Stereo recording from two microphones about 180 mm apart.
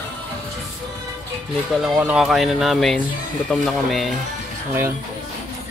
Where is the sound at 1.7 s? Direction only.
5° right (ahead or behind).